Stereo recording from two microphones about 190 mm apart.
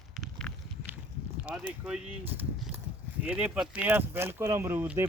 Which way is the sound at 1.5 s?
5° right (ahead or behind).